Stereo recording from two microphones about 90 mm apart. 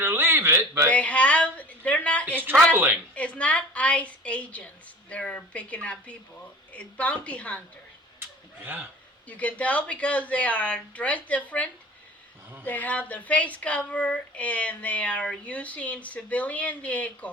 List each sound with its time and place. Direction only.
0.0 s a man's voice: 25° right (ahead or behind)
0.9 s speech: 15° left (ahead or behind)
2.7 s a man's voice: 20° right (ahead or behind)
3.2 s speech: 15° left (ahead or behind)
8.2 s a sound: 20° right (ahead or behind)
9.2 s speech: 15° left (ahead or behind)